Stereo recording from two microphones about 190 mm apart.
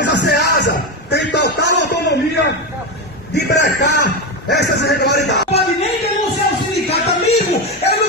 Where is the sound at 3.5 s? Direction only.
65° left (ahead or behind).